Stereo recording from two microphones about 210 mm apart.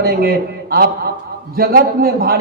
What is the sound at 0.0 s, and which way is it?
A man's voice, 45° right (ahead or behind).